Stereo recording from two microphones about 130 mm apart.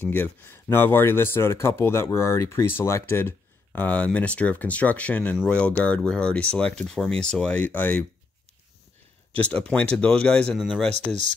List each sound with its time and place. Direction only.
0.1 s speech: 15° left (ahead or behind)
9.3 s speech: 10° left (ahead or behind)